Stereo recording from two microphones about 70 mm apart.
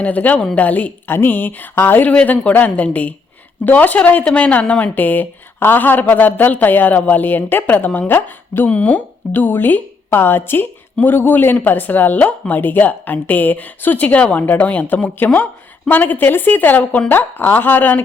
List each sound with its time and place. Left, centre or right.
0.0 s a woman's voice: left